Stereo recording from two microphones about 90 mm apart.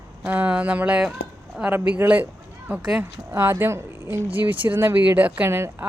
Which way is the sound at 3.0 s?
25° right (ahead or behind).